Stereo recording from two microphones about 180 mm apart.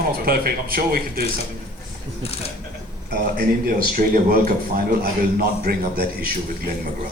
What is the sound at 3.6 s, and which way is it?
Speech, 55° right (ahead or behind).